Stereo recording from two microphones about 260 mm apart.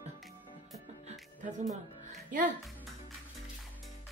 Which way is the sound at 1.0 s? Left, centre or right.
Right.